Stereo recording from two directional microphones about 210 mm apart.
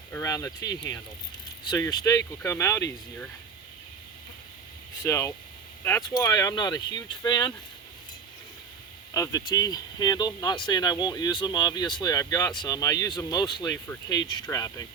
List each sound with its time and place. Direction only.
0.1 s speech: 15° left (ahead or behind)
5.0 s speech: 15° left (ahead or behind)
9.1 s speech: 15° left (ahead or behind)